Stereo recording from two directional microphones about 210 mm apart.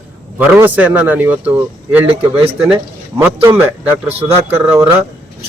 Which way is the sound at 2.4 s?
25° right (ahead or behind).